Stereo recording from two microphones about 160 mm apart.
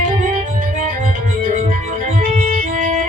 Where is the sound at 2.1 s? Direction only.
50° right (ahead or behind).